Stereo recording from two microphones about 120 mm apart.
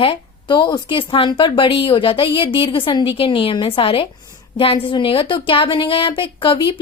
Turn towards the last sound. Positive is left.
turn(degrees=45)  # may be behind; listen again after turning